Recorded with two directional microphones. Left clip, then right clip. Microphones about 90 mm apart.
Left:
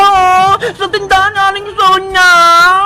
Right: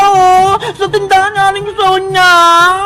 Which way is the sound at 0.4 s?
40° left (ahead or behind).